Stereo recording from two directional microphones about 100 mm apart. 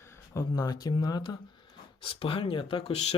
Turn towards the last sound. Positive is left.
turn(degrees=80)